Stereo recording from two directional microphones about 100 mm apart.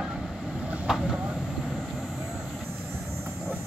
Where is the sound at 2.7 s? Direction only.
20° right (ahead or behind).